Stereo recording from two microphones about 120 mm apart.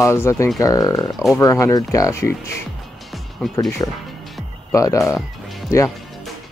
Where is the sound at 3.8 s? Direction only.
30° left (ahead or behind).